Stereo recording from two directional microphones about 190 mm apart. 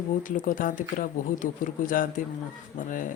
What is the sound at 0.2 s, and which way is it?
Speech, 45° left (ahead or behind).